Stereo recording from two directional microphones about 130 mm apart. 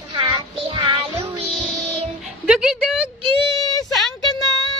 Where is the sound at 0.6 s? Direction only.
45° right (ahead or behind).